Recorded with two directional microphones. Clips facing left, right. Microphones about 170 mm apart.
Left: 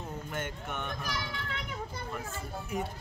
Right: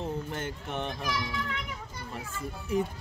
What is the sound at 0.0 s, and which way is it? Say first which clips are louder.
Speech: right 4 dB; 30° right (ahead or behind).